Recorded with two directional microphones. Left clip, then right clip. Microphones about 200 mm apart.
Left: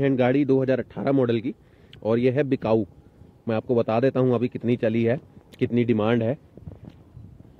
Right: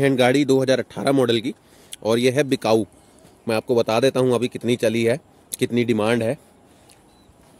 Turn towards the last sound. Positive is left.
turn(degrees=-10)  # may be behind; listen again after turning